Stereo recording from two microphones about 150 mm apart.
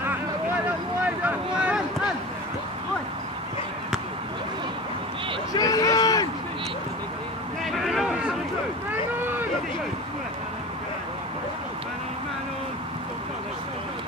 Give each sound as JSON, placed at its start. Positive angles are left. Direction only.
{"t": 1.0, "sound": "boat", "side_deg": -10}
{"t": 5.5, "sound": "run", "side_deg": 25}
{"t": 7.7, "sound": "a sound", "side_deg": 0}